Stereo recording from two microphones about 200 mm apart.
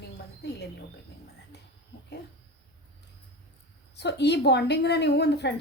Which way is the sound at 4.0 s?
60° left (ahead or behind).